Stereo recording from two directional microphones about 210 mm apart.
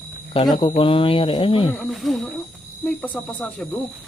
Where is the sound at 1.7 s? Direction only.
5° left (ahead or behind).